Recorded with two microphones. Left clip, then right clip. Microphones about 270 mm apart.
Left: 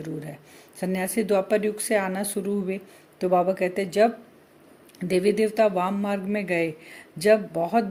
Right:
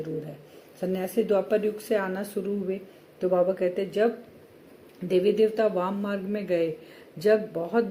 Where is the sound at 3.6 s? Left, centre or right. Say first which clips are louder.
Left 3 dB; left.